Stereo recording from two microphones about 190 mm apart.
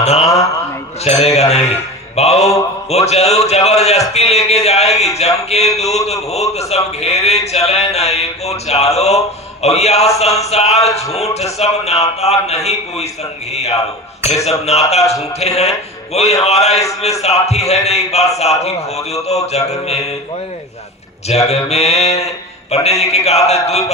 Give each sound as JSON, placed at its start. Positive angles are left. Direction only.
{"t": 0.0, "sound": "mantra", "side_deg": 35}
{"t": 1.0, "sound": "a man's voice", "side_deg": 35}
{"t": 21.2, "sound": "a man's voice", "side_deg": 35}